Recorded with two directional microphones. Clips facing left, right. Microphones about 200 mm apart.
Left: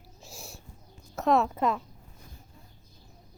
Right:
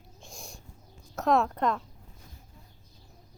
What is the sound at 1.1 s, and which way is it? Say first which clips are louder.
Speech: left 1 dB; centre (ahead or behind).